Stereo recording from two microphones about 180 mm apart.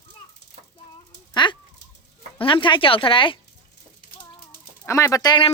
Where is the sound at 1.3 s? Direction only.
25° left (ahead or behind).